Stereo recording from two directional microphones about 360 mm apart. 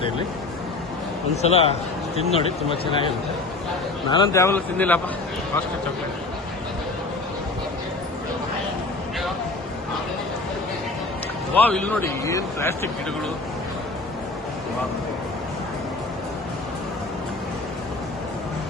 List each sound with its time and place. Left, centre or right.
1.4 s speech: centre
4.1 s speech: centre
11.5 s speech: centre